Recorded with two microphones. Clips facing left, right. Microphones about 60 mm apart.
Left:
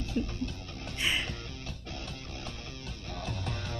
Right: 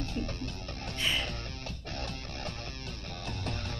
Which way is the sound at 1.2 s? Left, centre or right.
Right.